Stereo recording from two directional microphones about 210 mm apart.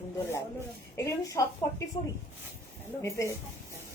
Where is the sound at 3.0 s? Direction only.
15° left (ahead or behind).